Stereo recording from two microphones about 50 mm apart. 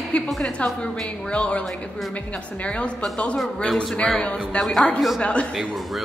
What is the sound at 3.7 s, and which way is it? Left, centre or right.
Speech, centre.